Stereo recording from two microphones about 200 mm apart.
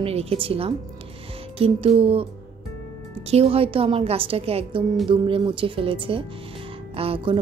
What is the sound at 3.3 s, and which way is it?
Speech, 30° right (ahead or behind).